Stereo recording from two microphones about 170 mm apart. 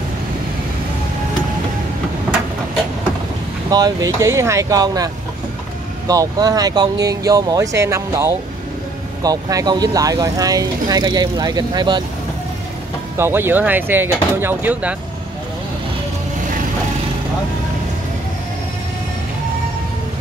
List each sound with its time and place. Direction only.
3.7 s speech: 20° right (ahead or behind)
13.2 s speech: 15° right (ahead or behind)